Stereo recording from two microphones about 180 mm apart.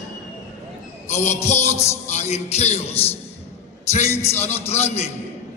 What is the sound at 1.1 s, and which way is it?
Speech, 40° left (ahead or behind).